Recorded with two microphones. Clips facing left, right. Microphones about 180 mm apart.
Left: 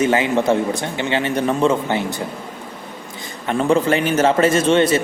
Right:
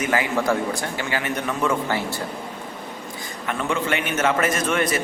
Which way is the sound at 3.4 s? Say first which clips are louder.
Left 8 dB; 30° left (ahead or behind).